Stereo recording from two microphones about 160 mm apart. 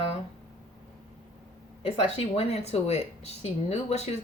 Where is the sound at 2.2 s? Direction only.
40° left (ahead or behind).